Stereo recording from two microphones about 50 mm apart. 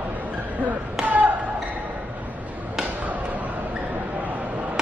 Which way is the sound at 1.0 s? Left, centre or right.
Right.